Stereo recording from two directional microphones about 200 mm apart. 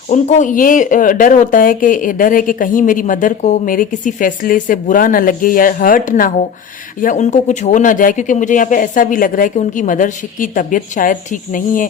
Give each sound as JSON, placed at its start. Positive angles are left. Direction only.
{"t": 0.1, "sound": "speech", "side_deg": 35}